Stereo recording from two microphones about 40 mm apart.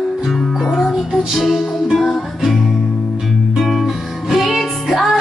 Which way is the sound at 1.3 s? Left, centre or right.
Centre.